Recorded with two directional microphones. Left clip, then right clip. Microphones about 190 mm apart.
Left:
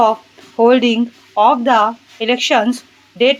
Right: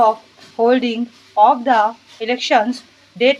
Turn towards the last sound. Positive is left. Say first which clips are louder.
# left 2 dB
turn(degrees=20)  # may be behind; listen again after turning